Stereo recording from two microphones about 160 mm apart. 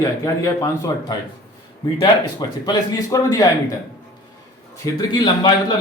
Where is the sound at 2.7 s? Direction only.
20° left (ahead or behind).